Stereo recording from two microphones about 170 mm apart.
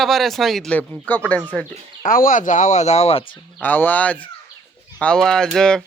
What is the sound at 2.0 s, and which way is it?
Speech, 55° left (ahead or behind).